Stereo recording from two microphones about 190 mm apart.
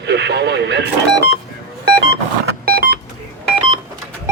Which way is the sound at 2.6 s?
55° right (ahead or behind).